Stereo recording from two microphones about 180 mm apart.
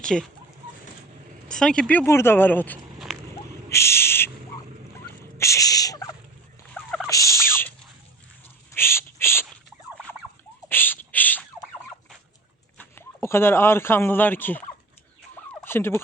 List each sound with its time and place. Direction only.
0.0 s speech: 5° left (ahead or behind)
1.5 s speech: 5° left (ahead or behind)
3.3 s a sound: 15° left (ahead or behind)
5.4 s turkey: 15° left (ahead or behind)
6.7 s turkey: 5° left (ahead or behind)
7.1 s turkey: 15° left (ahead or behind)
8.7 s a sound: 15° left (ahead or behind)
9.6 s fowl: 5° left (ahead or behind)
10.7 s a sound: 10° left (ahead or behind)
12.7 s speech: 10° left (ahead or behind)
15.6 s fowl: 15° left (ahead or behind)